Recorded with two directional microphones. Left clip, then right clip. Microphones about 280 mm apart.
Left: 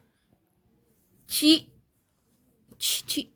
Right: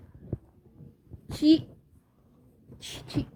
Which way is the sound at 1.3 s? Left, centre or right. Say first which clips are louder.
Left 1 dB; left.